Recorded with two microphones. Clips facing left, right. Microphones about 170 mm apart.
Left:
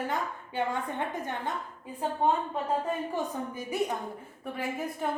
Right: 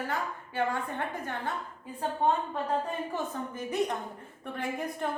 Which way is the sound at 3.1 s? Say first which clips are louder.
Left 2 dB; 10° left (ahead or behind).